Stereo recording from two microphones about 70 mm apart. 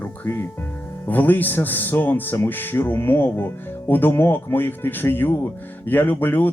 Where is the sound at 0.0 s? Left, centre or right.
Left.